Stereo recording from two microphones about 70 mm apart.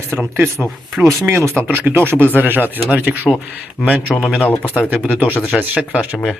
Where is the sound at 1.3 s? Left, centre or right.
Right.